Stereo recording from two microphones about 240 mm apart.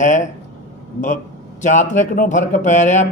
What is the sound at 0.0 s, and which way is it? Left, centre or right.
Speech, left.